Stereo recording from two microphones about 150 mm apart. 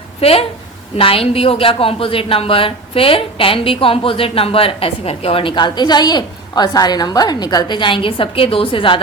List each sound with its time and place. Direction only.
0.2 s a woman's voice: 40° left (ahead or behind)